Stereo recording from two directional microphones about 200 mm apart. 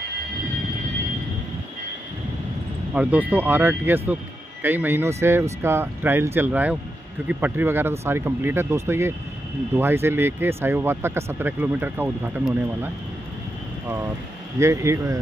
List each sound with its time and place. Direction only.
2.9 s speech: 5° right (ahead or behind)
14.6 s speech: 15° right (ahead or behind)